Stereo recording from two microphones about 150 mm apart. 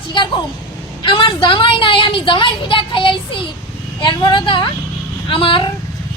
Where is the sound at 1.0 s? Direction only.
35° left (ahead or behind).